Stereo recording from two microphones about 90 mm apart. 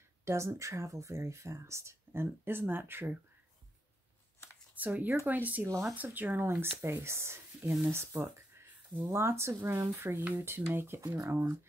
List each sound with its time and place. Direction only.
0.2 s speech: 30° right (ahead or behind)
4.7 s speech: 20° right (ahead or behind)
5.7 s speech: 5° left (ahead or behind)
5.9 s speech: 20° right (ahead or behind)